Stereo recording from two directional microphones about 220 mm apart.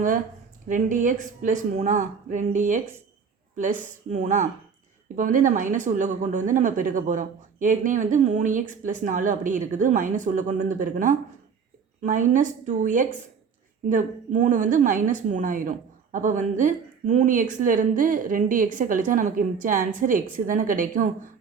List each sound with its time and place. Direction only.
0.7 s speech: 35° right (ahead or behind)